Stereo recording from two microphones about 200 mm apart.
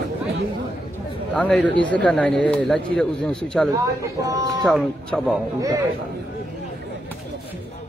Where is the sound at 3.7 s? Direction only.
20° right (ahead or behind).